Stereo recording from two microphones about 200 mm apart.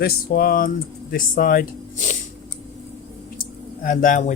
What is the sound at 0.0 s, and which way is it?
Speech, 50° left (ahead or behind).